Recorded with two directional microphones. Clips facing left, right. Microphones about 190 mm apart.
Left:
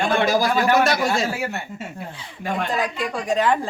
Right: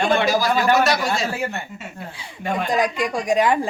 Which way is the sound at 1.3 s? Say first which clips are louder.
Even; 5° left (ahead or behind).